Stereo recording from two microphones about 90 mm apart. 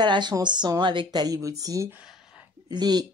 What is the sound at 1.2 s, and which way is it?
Speech, 40° right (ahead or behind).